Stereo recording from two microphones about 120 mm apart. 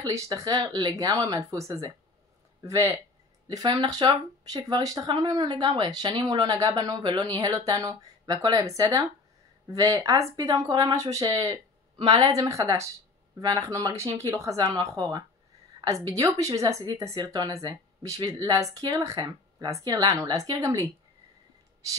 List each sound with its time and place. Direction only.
0.0 s a woman's voice: 25° right (ahead or behind)